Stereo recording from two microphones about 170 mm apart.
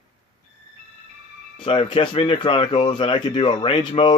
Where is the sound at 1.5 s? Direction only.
30° left (ahead or behind).